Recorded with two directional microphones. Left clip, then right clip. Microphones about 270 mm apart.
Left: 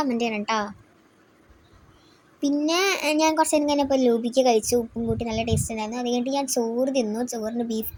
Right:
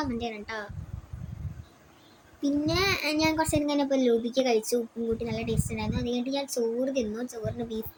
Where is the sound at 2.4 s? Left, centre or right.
Centre.